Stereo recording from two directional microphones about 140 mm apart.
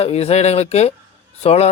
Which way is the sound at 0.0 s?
50° left (ahead or behind).